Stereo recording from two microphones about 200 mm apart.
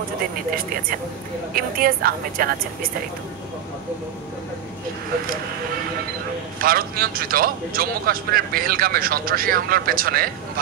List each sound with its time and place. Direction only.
1.5 s a man's voice: 45° right (ahead or behind)
6.6 s a man's voice: 45° right (ahead or behind)